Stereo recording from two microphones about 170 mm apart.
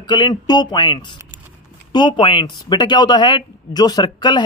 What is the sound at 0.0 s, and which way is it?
Speech, 25° left (ahead or behind).